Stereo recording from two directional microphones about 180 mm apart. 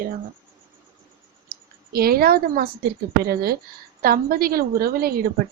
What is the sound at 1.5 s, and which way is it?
A woman's voice, 55° right (ahead or behind).